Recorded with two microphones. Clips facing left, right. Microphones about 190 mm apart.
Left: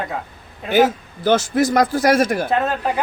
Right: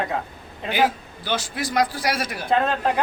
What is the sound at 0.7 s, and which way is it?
A man's voice, 45° left (ahead or behind).